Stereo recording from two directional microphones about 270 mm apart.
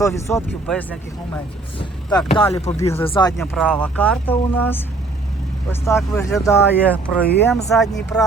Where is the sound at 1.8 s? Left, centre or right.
Centre.